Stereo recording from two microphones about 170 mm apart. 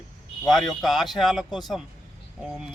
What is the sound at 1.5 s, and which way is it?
Speech, 25° left (ahead or behind).